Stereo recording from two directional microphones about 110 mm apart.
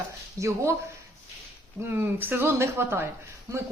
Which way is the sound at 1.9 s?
20° right (ahead or behind).